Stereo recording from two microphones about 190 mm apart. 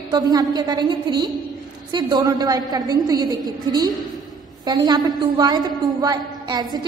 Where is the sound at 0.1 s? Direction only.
20° right (ahead or behind).